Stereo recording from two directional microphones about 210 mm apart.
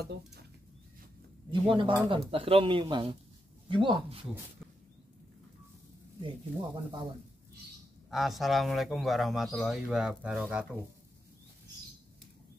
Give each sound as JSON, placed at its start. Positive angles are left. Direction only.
{"t": 1.5, "sound": "speech", "side_deg": -25}
{"t": 6.2, "sound": "speech", "side_deg": -20}
{"t": 8.1, "sound": "speech", "side_deg": 0}